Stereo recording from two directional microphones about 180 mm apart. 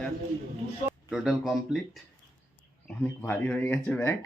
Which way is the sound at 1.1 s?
Centre (ahead or behind).